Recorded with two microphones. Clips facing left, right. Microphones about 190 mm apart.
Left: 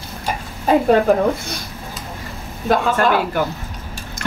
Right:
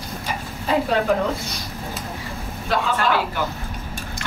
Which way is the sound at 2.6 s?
50° left (ahead or behind).